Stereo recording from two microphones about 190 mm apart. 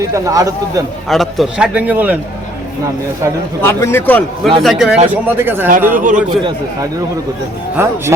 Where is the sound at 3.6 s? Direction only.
15° left (ahead or behind).